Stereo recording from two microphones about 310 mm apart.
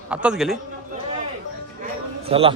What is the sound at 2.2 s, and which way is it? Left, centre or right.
Speech, centre.